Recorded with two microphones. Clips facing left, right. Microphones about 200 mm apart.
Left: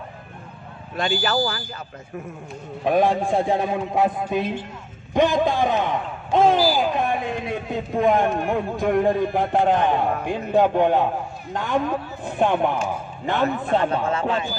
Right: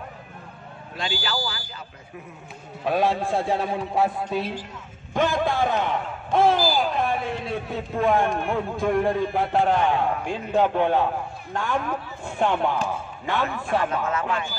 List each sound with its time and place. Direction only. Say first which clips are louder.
0.9 s speech: left 7 dB; 50° left (ahead or behind)
2.8 s a man's voice: left 3 dB; 15° left (ahead or behind)